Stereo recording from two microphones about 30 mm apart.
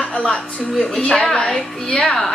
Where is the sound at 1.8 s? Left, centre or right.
Left.